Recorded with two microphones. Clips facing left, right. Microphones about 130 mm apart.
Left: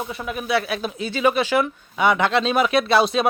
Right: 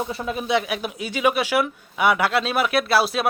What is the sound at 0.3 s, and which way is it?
Speech, 25° right (ahead or behind).